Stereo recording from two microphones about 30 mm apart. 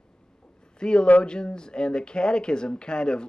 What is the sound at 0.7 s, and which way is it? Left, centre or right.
A man's voice, left.